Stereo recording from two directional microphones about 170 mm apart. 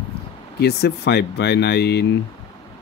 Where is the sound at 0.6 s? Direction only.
75° left (ahead or behind).